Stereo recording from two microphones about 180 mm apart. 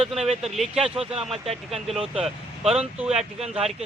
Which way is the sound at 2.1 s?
Centre (ahead or behind).